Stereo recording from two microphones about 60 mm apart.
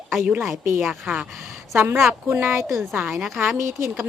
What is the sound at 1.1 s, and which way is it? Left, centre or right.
Speech, right.